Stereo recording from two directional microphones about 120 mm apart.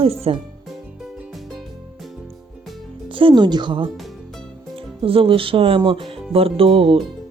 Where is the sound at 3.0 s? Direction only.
45° right (ahead or behind).